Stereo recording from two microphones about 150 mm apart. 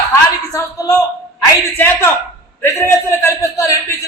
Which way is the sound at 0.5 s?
25° left (ahead or behind).